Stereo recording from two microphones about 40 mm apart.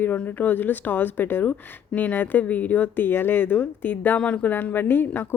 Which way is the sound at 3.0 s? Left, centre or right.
Left.